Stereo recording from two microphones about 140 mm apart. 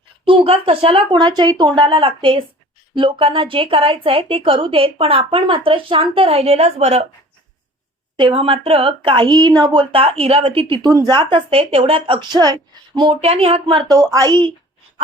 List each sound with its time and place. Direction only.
0.3 s a woman's voice: 40° right (ahead or behind)
8.1 s a woman's voice: 40° right (ahead or behind)
10.8 s a woman's voice: 25° right (ahead or behind)
11.2 s a woman's voice: 40° right (ahead or behind)
12.4 s a woman's voice: 30° right (ahead or behind)
13.1 s a woman's voice: 45° right (ahead or behind)
14.0 s a woman's voice: 25° right (ahead or behind)